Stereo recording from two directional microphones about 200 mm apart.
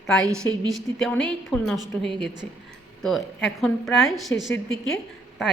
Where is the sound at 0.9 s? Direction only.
5° left (ahead or behind).